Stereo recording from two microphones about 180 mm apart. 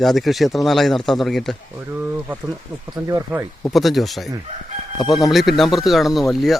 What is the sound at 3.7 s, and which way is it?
Speech, centre (ahead or behind).